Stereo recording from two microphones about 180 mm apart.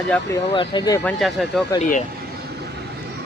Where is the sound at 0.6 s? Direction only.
25° left (ahead or behind).